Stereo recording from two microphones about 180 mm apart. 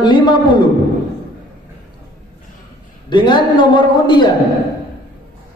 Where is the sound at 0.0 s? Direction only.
25° left (ahead or behind).